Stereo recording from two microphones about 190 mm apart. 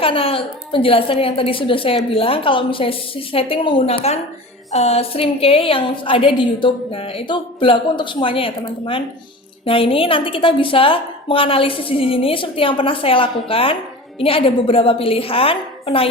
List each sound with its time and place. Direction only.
0.0 s a woman's voice: 30° left (ahead or behind)